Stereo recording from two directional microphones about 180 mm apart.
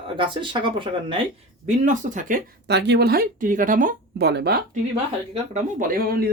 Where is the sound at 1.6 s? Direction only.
45° right (ahead or behind).